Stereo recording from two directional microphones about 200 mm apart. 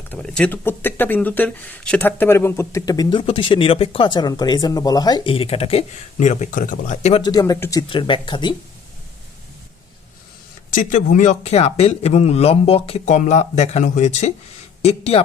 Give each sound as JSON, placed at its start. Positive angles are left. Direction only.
{"t": 0.1, "sound": "speech", "side_deg": 5}
{"t": 7.2, "sound": "speech", "side_deg": 20}
{"t": 10.7, "sound": "speech", "side_deg": 40}